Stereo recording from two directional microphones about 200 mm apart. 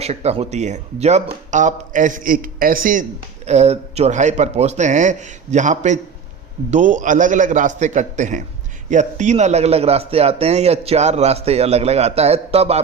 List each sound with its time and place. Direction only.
0.0 s a man's voice: 30° right (ahead or behind)
3.4 s a man's voice: 35° right (ahead or behind)